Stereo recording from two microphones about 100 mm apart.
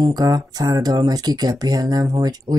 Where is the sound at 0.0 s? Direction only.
40° right (ahead or behind).